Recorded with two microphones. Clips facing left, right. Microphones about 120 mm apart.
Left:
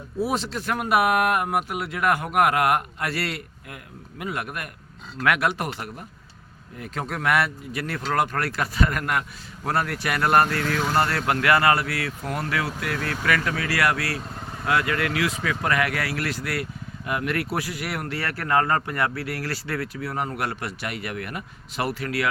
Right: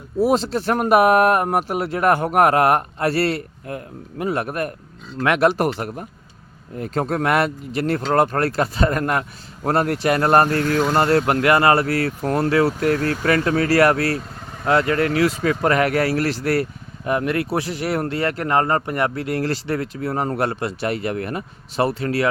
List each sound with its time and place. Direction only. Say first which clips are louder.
0.3 s speech: right 7 dB; 30° right (ahead or behind)
0.8 s speech: right 6 dB; 40° right (ahead or behind)